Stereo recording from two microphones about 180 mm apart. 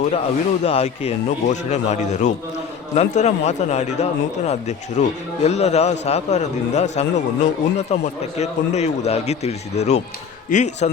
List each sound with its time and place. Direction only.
0.1 s speech: 35° left (ahead or behind)